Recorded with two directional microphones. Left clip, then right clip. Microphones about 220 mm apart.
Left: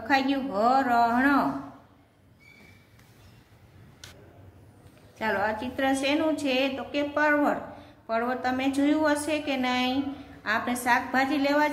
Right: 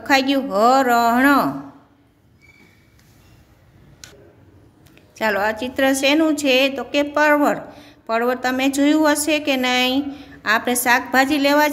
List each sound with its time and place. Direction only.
0.0 s a woman's voice: 50° right (ahead or behind)
5.1 s a woman's voice: 50° right (ahead or behind)